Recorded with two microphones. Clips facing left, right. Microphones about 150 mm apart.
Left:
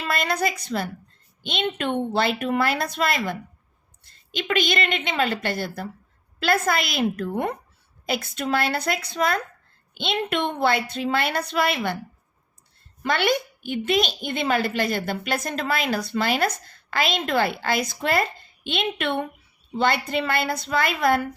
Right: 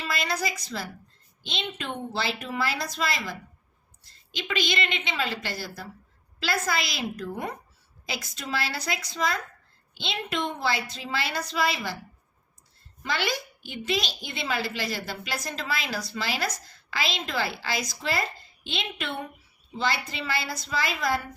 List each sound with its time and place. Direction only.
0.0 s a woman's voice: 55° left (ahead or behind)
13.0 s a woman's voice: 60° left (ahead or behind)